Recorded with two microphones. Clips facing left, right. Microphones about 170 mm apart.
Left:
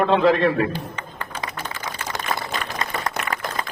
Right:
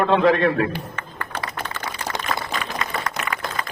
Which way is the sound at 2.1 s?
20° right (ahead or behind).